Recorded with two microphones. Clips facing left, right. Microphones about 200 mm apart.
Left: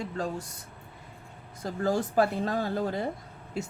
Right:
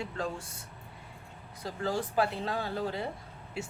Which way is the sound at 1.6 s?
45° left (ahead or behind).